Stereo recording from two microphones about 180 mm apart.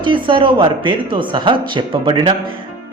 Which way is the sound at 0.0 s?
25° right (ahead or behind).